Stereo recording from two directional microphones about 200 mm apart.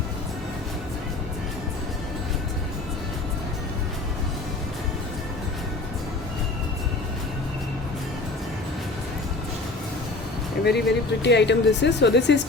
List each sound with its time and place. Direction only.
10.7 s speech: 60° left (ahead or behind)